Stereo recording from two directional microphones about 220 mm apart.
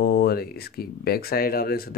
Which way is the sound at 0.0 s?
45° left (ahead or behind).